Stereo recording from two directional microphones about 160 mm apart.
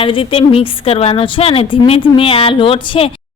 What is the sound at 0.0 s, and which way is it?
A woman's voice, 35° left (ahead or behind).